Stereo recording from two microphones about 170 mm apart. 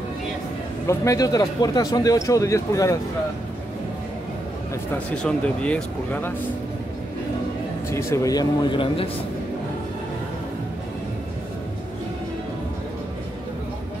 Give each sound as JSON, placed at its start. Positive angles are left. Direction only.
{"t": 0.8, "sound": "a man's voice", "side_deg": 20}
{"t": 4.9, "sound": "speech", "side_deg": 5}
{"t": 7.9, "sound": "a man's voice", "side_deg": 15}